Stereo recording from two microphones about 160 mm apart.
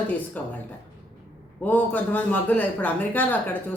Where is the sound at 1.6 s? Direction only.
10° left (ahead or behind).